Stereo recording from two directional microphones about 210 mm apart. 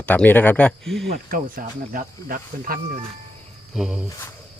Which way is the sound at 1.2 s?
40° right (ahead or behind).